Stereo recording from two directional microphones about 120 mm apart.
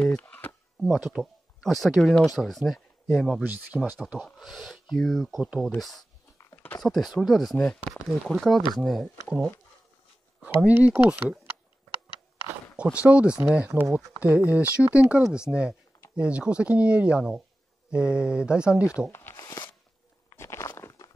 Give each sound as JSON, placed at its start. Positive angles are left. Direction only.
{"t": 0.0, "sound": "a sound", "side_deg": 10}
{"t": 0.7, "sound": "speech", "side_deg": 0}
{"t": 3.4, "sound": "speech", "side_deg": -15}
{"t": 4.0, "sound": "speech", "side_deg": 0}
{"t": 6.5, "sound": "a sound", "side_deg": 15}
{"t": 6.8, "sound": "speech", "side_deg": 0}
{"t": 7.5, "sound": "speech", "side_deg": 10}
{"t": 10.4, "sound": "speech", "side_deg": -10}
{"t": 13.0, "sound": "speech", "side_deg": -10}
{"t": 19.1, "sound": "a sound", "side_deg": 15}